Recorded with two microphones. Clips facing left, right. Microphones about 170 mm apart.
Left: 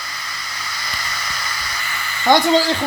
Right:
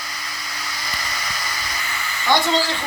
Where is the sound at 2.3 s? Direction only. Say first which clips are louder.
Left 5 dB; 50° left (ahead or behind).